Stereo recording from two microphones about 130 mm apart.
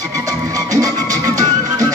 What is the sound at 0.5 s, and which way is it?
Music, 25° right (ahead or behind).